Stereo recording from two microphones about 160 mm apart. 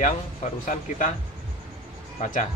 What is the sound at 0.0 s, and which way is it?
Speech, 55° left (ahead or behind).